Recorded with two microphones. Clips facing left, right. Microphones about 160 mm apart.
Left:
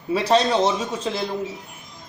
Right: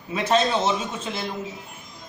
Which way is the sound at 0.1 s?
35° left (ahead or behind).